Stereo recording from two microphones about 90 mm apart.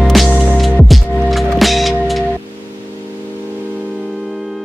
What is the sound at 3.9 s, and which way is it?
Music, 5° right (ahead or behind).